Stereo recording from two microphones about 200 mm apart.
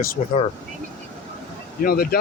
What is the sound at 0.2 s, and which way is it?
Speech, 35° left (ahead or behind).